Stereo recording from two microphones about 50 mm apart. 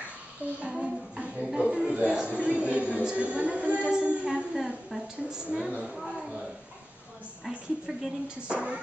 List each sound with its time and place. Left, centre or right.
0.4 s speech: right
0.7 s a woman's voice: centre
4.6 s a woman's voice: centre
7.4 s a woman's voice: centre
8.5 s speech: right